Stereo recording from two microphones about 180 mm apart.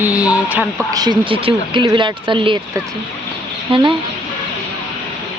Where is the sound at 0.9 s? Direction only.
20° right (ahead or behind).